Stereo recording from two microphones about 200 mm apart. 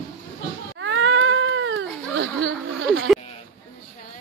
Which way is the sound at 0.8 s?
70° right (ahead or behind).